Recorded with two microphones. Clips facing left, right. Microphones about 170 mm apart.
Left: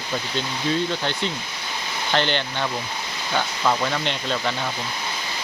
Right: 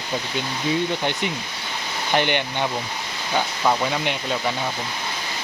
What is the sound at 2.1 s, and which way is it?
Speech, 15° right (ahead or behind).